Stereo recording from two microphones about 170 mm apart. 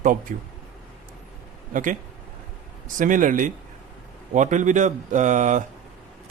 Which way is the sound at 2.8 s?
50° right (ahead or behind).